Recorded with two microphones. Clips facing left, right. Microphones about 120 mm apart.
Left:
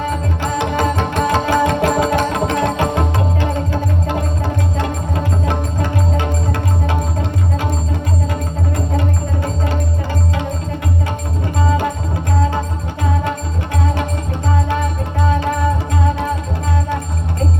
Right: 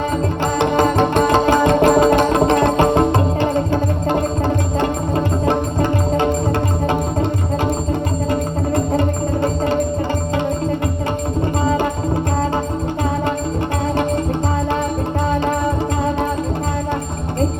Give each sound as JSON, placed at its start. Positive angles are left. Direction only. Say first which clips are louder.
{"t": 0.6, "sound": "music", "louder": "right 4 dB", "side_deg": -45}
{"t": 5.8, "sound": "music", "louder": "right 4 dB", "side_deg": -45}
{"t": 9.0, "sound": "music", "louder": "right 4 dB", "side_deg": -40}